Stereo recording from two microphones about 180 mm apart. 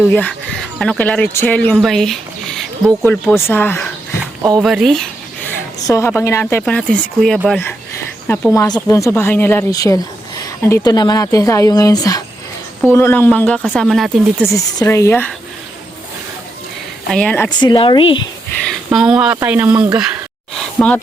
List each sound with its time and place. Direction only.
0.1 s speech: 10° left (ahead or behind)
4.2 s a sound: 20° right (ahead or behind)
4.6 s a sound: centre (ahead or behind)
5.8 s speech: 15° left (ahead or behind); by 7.6 s 5° right (ahead or behind)
8.5 s speech: 20° left (ahead or behind); by 14.4 s centre (ahead or behind)
14.4 s speech: 20° left (ahead or behind)
17.1 s speech: 5° left (ahead or behind)
17.6 s speech: 25° left (ahead or behind)
18.9 s speech: 5° right (ahead or behind)
20.6 s a sound: 5° left (ahead or behind)